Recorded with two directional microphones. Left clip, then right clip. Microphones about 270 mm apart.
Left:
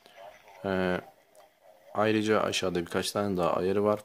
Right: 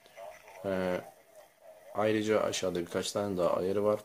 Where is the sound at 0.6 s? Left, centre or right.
Left.